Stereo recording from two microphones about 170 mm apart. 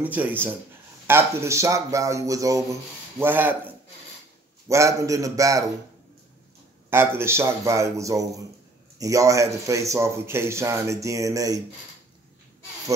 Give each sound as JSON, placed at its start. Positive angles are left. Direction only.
{"t": 0.0, "sound": "a man's voice", "side_deg": -10}
{"t": 6.9, "sound": "speech", "side_deg": -15}